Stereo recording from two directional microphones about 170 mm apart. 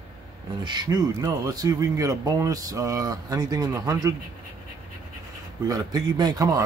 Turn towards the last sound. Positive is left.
turn(degrees=-20)  # may be behind; listen again after turning